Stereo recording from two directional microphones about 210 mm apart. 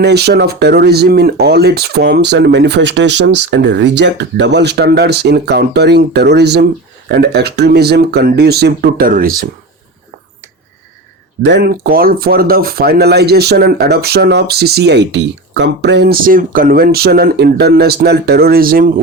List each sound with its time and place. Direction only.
0.0 s speech: 50° right (ahead or behind)
11.4 s speech: 50° right (ahead or behind)